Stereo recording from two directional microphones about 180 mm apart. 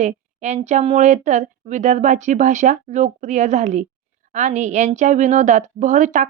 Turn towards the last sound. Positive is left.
turn(degrees=-45)  # may be behind; listen again after turning